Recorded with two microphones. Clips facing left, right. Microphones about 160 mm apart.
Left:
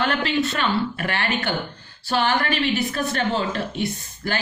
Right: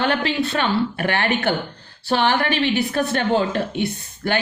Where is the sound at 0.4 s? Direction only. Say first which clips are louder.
Right 2 dB; 55° right (ahead or behind).